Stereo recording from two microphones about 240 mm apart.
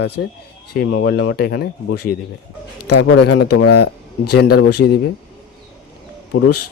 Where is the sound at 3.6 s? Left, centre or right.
Left.